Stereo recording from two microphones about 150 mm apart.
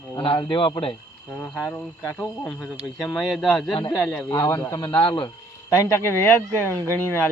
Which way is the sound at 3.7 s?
35° left (ahead or behind).